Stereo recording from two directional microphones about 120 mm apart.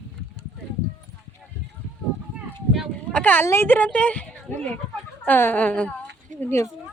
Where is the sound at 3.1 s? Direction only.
15° left (ahead or behind).